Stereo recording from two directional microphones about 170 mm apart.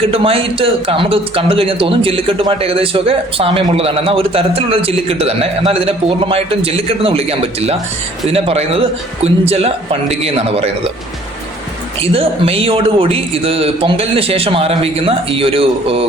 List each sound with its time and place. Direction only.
0.0 s a man's voice: 35° right (ahead or behind)
12.1 s a man's voice: 35° right (ahead or behind)